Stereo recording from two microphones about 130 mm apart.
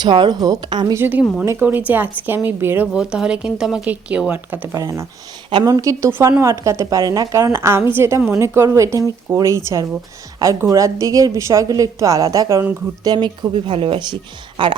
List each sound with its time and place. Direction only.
0.0 s speech: 35° right (ahead or behind)
0.9 s speech: 15° right (ahead or behind)
1.2 s speech: 5° left (ahead or behind)
1.5 s a woman's voice: 15° right (ahead or behind)
5.5 s a woman's voice: 35° right (ahead or behind)